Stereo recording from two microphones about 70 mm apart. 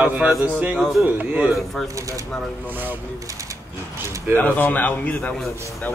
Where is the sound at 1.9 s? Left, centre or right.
Right.